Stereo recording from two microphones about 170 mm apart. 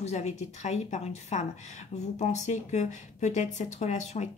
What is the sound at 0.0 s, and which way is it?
Speech, 40° left (ahead or behind).